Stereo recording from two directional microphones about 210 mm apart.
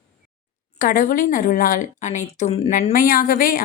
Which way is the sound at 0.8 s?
40° left (ahead or behind).